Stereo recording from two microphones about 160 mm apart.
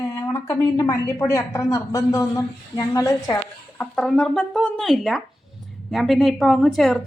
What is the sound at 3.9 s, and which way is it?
A woman's voice, centre (ahead or behind).